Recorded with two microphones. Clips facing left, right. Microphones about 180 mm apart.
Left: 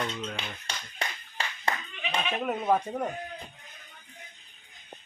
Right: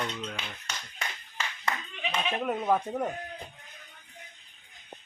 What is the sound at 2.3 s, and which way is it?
Speech, centre (ahead or behind).